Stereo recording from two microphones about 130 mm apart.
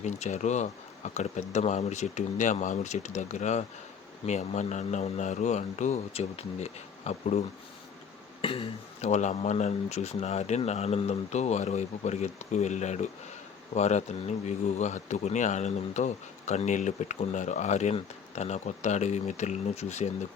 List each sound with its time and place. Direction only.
0.0 s speech: 60° left (ahead or behind)
8.4 s speech: 45° left (ahead or behind)